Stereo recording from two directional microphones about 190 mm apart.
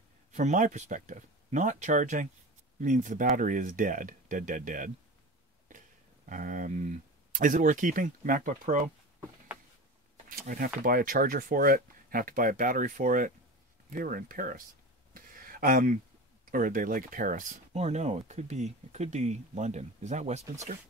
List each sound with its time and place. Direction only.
0.3 s speech: 40° right (ahead or behind)
6.2 s speech: 45° right (ahead or behind)
10.4 s speech: 50° right (ahead or behind)
15.1 s a sound: 50° right (ahead or behind)
16.5 s speech: 45° right (ahead or behind)